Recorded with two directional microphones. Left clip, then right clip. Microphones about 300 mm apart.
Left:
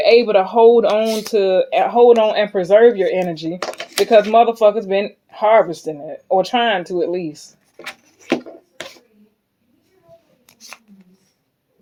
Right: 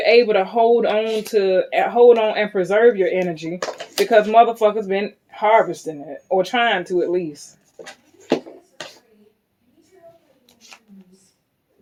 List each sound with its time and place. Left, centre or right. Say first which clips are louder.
0.0 s speech: left 2 dB; left